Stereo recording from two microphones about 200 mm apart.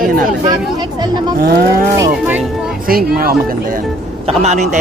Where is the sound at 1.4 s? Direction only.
50° right (ahead or behind).